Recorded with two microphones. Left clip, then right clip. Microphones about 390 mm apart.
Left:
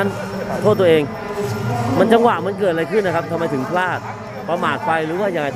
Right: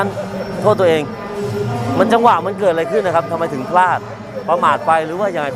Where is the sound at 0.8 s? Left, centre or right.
Right.